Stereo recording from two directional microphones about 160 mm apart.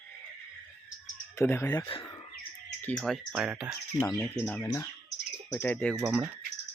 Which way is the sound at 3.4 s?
10° right (ahead or behind).